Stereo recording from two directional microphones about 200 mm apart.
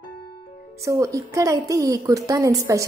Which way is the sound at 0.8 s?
15° right (ahead or behind).